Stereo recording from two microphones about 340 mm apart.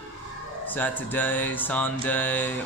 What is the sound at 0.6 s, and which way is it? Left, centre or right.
Speech, centre.